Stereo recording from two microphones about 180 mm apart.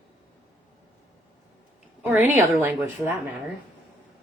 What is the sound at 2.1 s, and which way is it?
Speech, 10° right (ahead or behind).